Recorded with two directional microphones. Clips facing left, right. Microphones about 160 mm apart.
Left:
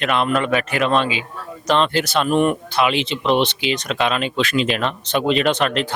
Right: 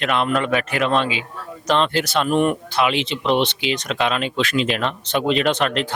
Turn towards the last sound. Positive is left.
turn(degrees=10)  # may be behind; listen again after turning